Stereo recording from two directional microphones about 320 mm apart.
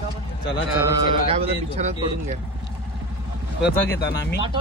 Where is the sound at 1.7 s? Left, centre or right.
Right.